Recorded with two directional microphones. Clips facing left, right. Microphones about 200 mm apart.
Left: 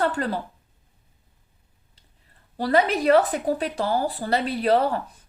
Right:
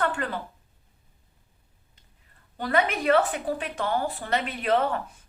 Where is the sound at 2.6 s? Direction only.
35° left (ahead or behind).